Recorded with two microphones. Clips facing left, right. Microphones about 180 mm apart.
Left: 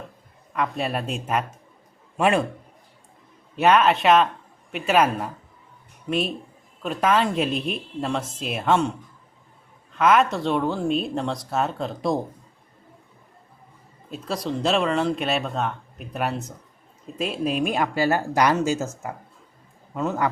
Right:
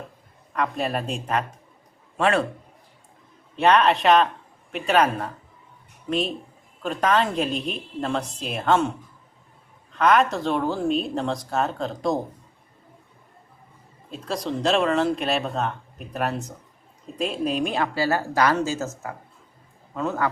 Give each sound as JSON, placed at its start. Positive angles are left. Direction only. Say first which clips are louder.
{"t": 0.5, "sound": "a man's voice", "louder": "even", "side_deg": 0}
{"t": 3.5, "sound": "speech", "louder": "even", "side_deg": 5}
{"t": 9.9, "sound": "speech", "louder": "even", "side_deg": 0}
{"t": 14.1, "sound": "speech", "louder": "even", "side_deg": 0}
{"t": 17.7, "sound": "a man's voice", "louder": "left 1 dB", "side_deg": 15}